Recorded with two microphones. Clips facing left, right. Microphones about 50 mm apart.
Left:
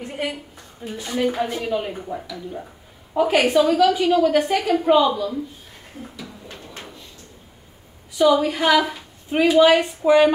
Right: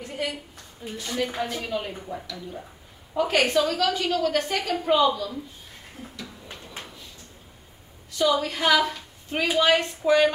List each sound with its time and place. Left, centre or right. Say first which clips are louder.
0.0 s a sound: left 3 dB; left
0.9 s a woman's voice: left 6 dB; centre
8.1 s a woman's voice: left 6 dB; centre